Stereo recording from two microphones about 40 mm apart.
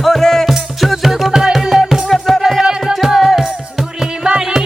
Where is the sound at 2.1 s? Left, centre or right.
Centre.